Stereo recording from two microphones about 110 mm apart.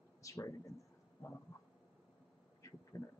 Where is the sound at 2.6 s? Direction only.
30° left (ahead or behind).